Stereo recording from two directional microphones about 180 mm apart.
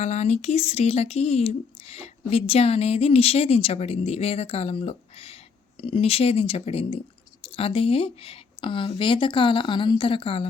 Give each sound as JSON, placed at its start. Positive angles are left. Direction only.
{"t": 0.0, "sound": "speech", "side_deg": 40}